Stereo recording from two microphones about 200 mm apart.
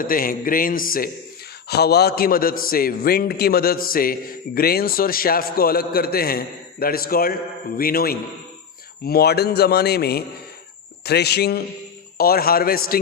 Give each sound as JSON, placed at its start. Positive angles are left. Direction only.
{"t": 0.0, "sound": "a man's voice", "side_deg": 45}